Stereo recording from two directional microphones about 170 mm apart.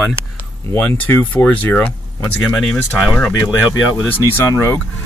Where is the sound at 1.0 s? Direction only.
10° left (ahead or behind).